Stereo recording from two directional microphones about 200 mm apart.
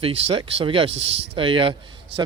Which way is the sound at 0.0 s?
30° right (ahead or behind).